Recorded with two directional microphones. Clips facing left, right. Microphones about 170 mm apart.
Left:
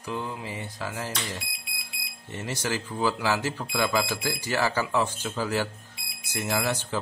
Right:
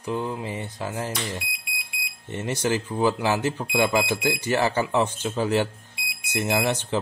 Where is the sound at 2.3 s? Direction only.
20° right (ahead or behind).